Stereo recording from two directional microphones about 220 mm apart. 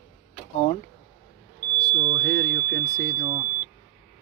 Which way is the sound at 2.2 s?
50° right (ahead or behind).